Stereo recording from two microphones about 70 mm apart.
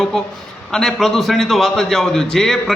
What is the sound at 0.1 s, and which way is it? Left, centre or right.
A man's voice, centre.